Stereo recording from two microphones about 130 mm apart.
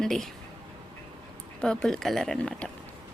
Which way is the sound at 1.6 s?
5° left (ahead or behind).